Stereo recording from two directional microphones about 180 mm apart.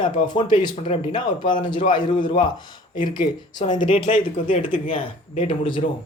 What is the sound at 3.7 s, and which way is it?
Speech, 45° left (ahead or behind).